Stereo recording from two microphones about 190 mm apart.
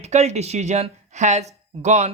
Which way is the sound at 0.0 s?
35° right (ahead or behind).